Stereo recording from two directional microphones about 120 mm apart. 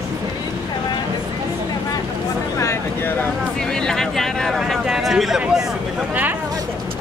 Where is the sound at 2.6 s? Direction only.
25° left (ahead or behind).